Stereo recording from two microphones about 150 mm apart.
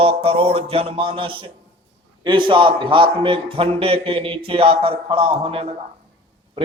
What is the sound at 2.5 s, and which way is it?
A man's voice, 35° right (ahead or behind).